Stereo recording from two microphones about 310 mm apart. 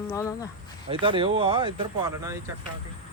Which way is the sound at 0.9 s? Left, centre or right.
Centre.